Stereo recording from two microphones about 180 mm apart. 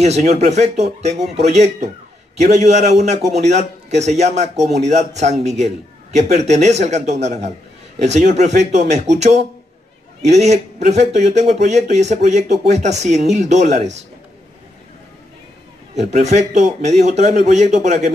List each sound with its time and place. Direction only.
0.0 s a man's voice: 40° right (ahead or behind)
10.2 s a man's voice: 40° right (ahead or behind)
15.9 s a man's voice: 40° right (ahead or behind)